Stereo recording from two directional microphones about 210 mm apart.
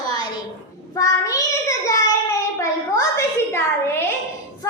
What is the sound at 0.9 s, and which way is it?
Child singing, 15° left (ahead or behind).